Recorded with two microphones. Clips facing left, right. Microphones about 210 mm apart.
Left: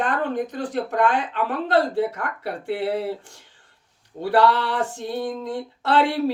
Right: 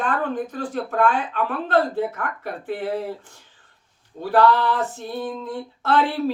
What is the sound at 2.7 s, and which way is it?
Speech, 70° left (ahead or behind).